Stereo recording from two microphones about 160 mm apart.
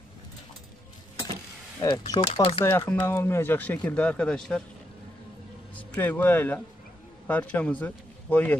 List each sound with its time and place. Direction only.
1.8 s speech: 25° left (ahead or behind)
2.6 s speech: 15° left (ahead or behind)
5.8 s a man's voice: 10° left (ahead or behind)